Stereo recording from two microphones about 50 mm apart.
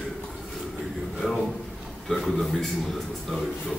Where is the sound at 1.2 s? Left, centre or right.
Left.